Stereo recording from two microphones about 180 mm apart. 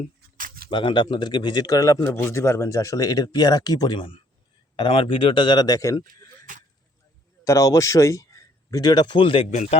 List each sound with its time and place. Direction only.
0.3 s a sound: 50° right (ahead or behind)
0.7 s speech: 30° left (ahead or behind)
7.4 s speech: 15° left (ahead or behind); by 9.7 s 40° left (ahead or behind)